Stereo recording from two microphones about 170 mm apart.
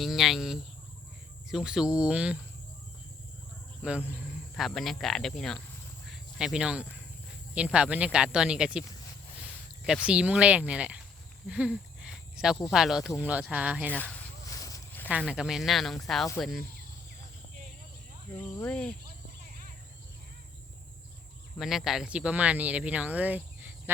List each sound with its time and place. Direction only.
0.0 s speech: centre (ahead or behind)
3.8 s speech: 10° right (ahead or behind)
6.1 s cricket: 5° right (ahead or behind)
7.5 s speech: 5° right (ahead or behind)
9.8 s speech: 5° right (ahead or behind)
11.4 s a sound: 5° right (ahead or behind)
12.7 s speech: centre (ahead or behind)
14.5 s a sound: 20° left (ahead or behind)
15.3 s speech: 5° right (ahead or behind)
18.5 s speech: 10° left (ahead or behind)
21.6 s speech: centre (ahead or behind)